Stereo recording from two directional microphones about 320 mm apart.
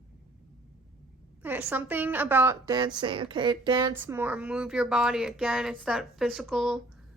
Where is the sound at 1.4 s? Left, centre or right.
Centre.